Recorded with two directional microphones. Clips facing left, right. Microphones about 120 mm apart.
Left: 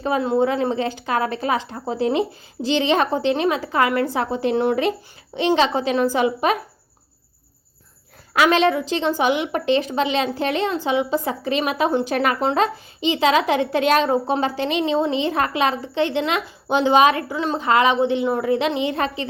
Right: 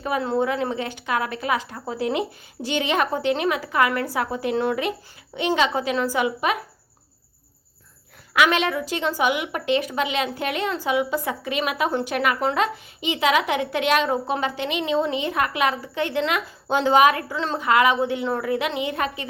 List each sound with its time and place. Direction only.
0.0 s a woman's voice: 25° left (ahead or behind)
8.3 s a woman's voice: 35° left (ahead or behind)
12.4 s a woman's voice: 20° left (ahead or behind)
17.6 s a woman's voice: 25° left (ahead or behind)